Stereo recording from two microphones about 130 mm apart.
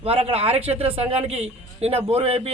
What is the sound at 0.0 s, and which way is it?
A man's voice, 50° right (ahead or behind).